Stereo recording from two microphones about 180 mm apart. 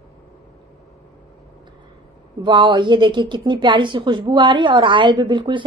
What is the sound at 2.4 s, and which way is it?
A woman's voice, 25° right (ahead or behind).